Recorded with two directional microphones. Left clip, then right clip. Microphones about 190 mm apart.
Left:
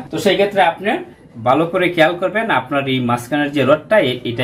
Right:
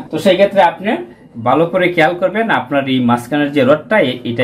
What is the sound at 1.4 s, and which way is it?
Speech, 15° right (ahead or behind).